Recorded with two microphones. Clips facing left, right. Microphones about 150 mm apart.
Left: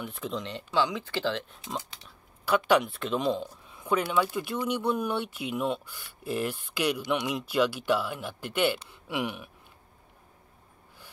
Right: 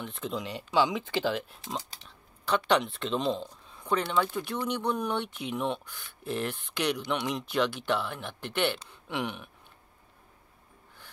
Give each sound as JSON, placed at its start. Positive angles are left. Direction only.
{"t": 0.0, "sound": "speech", "side_deg": 0}
{"t": 2.0, "sound": "speech", "side_deg": 10}